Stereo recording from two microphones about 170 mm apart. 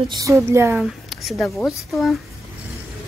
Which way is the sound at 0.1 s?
20° right (ahead or behind).